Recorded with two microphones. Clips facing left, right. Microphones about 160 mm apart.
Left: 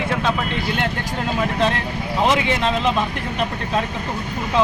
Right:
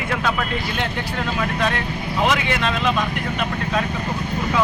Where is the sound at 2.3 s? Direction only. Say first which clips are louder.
Left 2 dB; 25° left (ahead or behind).